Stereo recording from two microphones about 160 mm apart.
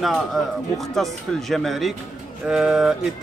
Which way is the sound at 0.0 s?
Centre (ahead or behind).